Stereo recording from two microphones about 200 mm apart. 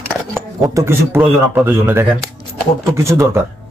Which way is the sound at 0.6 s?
15° right (ahead or behind).